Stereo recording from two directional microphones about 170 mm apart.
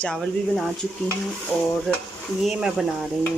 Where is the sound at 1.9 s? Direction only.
Centre (ahead or behind).